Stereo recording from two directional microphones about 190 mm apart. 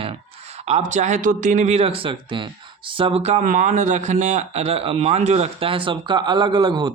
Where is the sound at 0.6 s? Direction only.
35° right (ahead or behind).